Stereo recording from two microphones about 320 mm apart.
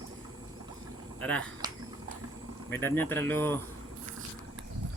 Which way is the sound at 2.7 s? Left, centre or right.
Centre.